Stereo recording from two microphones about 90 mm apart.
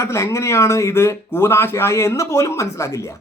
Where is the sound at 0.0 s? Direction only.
35° left (ahead or behind).